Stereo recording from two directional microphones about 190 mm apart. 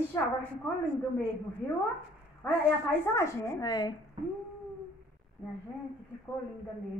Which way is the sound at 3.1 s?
15° left (ahead or behind).